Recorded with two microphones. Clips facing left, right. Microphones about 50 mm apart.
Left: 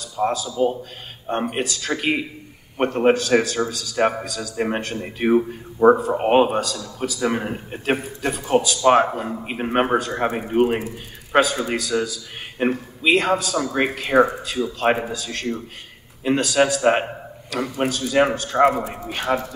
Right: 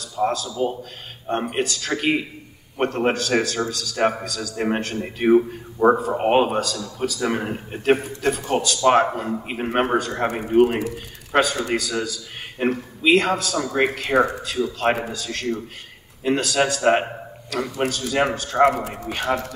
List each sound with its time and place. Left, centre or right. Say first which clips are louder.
0.0 s a man's voice: even; centre